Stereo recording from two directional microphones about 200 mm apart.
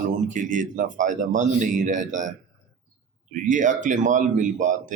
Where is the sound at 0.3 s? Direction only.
40° right (ahead or behind).